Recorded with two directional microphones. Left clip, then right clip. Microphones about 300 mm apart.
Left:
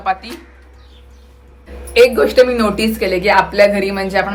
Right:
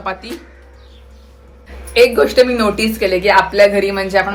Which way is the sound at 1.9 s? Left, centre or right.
Centre.